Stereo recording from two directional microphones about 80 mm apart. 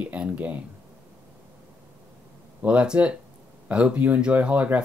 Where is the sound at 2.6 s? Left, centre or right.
Centre.